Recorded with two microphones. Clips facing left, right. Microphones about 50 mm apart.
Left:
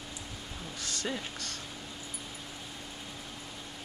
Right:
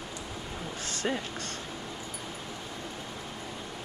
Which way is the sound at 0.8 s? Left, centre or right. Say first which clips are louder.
Right 4 dB; right.